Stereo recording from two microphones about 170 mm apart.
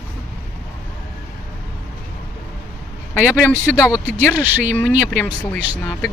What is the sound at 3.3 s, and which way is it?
Speech, 15° left (ahead or behind).